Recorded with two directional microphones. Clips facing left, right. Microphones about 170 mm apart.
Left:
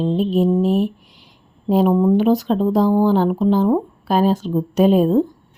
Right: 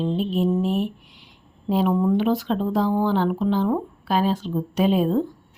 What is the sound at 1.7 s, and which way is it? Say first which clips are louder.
A woman's voice: left 5 dB; 40° left (ahead or behind).